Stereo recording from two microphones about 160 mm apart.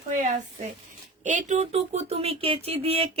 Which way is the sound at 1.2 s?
50° right (ahead or behind).